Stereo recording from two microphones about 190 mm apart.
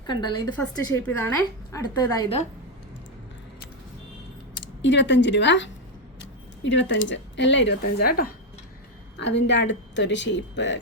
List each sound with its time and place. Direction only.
0.1 s a woman's voice: 25° left (ahead or behind)
4.8 s speech: 70° left (ahead or behind); by 8.3 s 50° left (ahead or behind)
9.1 s speech: 65° left (ahead or behind)